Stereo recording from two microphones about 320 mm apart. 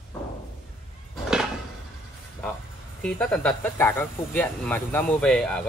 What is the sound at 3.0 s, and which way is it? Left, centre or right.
A man's voice, centre.